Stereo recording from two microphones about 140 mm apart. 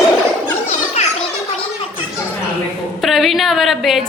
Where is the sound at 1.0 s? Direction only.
50° left (ahead or behind).